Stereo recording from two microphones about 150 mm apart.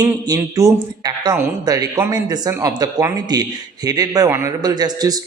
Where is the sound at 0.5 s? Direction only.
25° right (ahead or behind).